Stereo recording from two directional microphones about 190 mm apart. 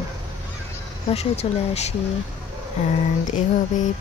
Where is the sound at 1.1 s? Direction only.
35° left (ahead or behind).